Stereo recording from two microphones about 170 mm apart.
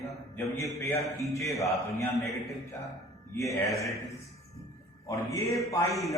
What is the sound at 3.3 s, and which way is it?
Speech, 20° left (ahead or behind).